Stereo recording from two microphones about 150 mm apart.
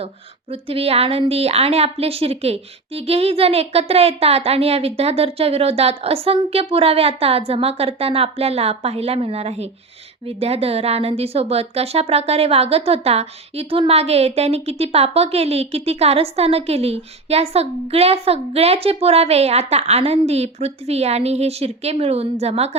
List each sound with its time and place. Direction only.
0.5 s a woman's voice: 40° right (ahead or behind)